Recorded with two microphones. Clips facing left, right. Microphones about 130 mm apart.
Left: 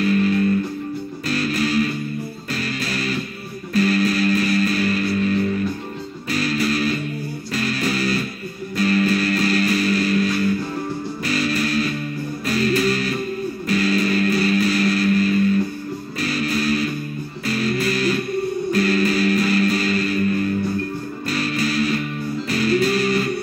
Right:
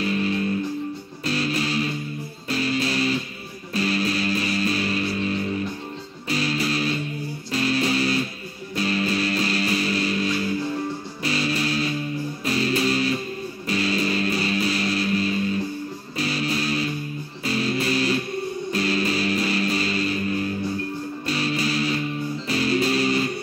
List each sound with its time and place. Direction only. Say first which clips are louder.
0.0 s music: left 6 dB; 25° right (ahead or behind)